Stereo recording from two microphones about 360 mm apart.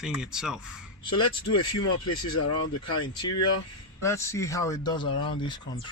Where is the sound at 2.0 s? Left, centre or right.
Left.